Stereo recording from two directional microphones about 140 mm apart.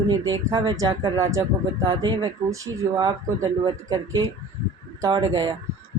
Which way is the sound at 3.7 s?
25° right (ahead or behind).